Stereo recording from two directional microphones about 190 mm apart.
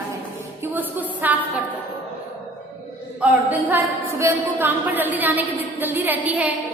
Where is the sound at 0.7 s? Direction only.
10° right (ahead or behind).